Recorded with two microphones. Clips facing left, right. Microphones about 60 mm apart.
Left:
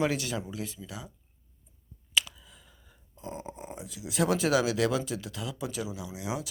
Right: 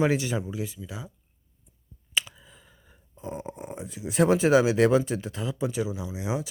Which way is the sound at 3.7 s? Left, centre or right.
Right.